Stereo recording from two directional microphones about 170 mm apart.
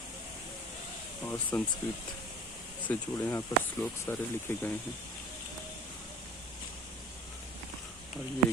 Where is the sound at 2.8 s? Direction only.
10° left (ahead or behind).